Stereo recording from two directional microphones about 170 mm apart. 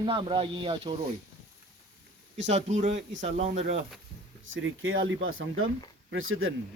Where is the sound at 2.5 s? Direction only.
40° right (ahead or behind).